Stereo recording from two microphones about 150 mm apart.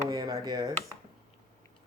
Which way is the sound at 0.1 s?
25° right (ahead or behind).